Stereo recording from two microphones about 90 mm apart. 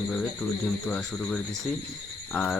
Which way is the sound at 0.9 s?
5° left (ahead or behind).